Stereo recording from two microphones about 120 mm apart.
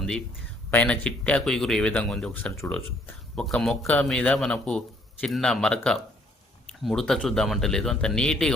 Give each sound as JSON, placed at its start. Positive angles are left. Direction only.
{"t": 0.7, "sound": "speech", "side_deg": 10}
{"t": 3.3, "sound": "speech", "side_deg": 5}